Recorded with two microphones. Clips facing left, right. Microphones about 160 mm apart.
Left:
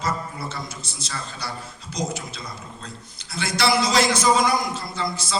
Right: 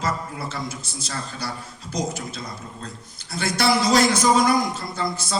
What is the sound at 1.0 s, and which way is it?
A man's voice, 45° right (ahead or behind).